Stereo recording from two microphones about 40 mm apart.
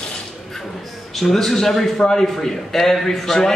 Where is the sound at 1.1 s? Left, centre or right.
Centre.